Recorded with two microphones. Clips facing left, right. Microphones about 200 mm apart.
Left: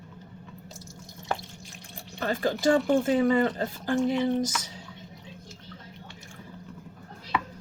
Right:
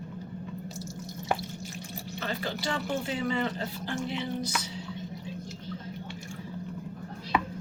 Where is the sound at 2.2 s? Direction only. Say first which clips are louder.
Left 9 dB; 45° left (ahead or behind).